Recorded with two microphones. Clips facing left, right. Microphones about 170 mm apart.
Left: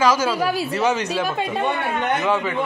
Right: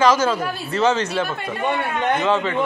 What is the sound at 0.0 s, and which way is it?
Speech, 10° left (ahead or behind).